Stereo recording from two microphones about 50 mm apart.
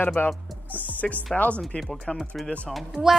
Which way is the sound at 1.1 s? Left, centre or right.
Left.